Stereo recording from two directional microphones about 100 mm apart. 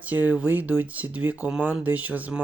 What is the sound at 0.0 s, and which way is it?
Speech, 15° right (ahead or behind).